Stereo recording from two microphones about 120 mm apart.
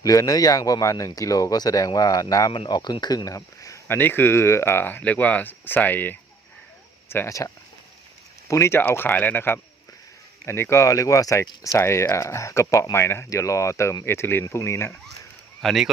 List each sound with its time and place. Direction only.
0.0 s speech: 30° left (ahead or behind)
15.6 s speech: centre (ahead or behind)